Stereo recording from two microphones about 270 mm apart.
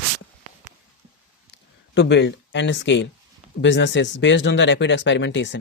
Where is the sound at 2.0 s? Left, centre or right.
Left.